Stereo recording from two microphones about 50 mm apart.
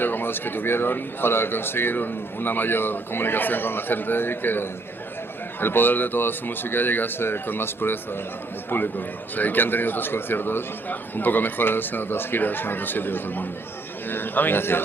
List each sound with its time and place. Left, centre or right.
0.0 s a man's voice: left